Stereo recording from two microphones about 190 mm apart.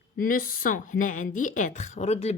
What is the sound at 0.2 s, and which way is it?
A woman's voice, 45° left (ahead or behind).